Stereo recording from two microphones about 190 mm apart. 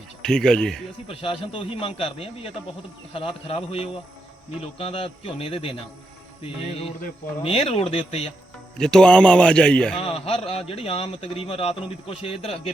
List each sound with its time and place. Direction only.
0.2 s a man's voice: 5° left (ahead or behind)
1.0 s a man's voice: 30° left (ahead or behind)
8.8 s a man's voice: 5° left (ahead or behind)
10.0 s a man's voice: 30° left (ahead or behind)